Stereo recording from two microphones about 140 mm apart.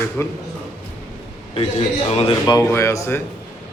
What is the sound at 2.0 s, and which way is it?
Speech, 45° left (ahead or behind).